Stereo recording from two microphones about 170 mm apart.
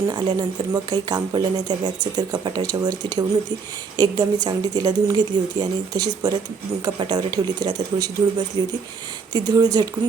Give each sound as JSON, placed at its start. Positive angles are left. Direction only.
{"t": 0.1, "sound": "speech", "side_deg": -25}